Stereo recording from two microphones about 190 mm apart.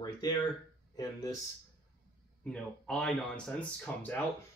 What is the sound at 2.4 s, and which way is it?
Speech, 5° left (ahead or behind).